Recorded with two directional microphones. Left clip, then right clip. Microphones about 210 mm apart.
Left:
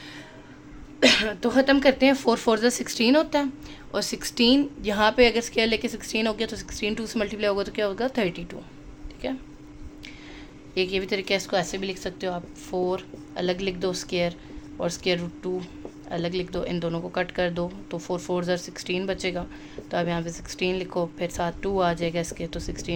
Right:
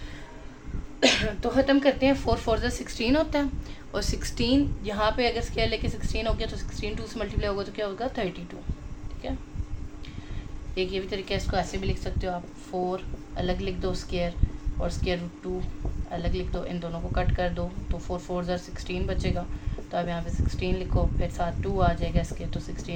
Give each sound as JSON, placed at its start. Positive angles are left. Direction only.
{"t": 0.9, "sound": "a woman's voice", "side_deg": 40}
{"t": 10.8, "sound": "a woman's voice", "side_deg": 55}